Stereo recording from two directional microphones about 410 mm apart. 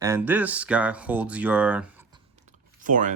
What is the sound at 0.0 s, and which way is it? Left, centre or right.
Speech, centre.